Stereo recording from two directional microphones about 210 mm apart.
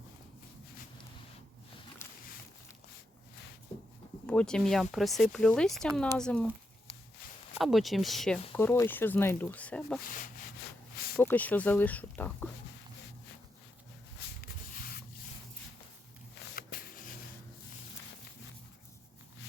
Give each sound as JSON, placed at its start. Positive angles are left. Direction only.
{"t": 4.3, "sound": "speech", "side_deg": 5}
{"t": 7.6, "sound": "speech", "side_deg": 0}
{"t": 11.2, "sound": "speech", "side_deg": 10}
{"t": 14.4, "sound": "sanding", "side_deg": 45}